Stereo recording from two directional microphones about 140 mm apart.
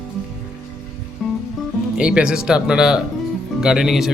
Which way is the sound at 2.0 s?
5° right (ahead or behind).